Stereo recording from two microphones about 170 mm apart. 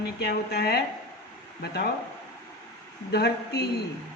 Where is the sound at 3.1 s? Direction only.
70° left (ahead or behind).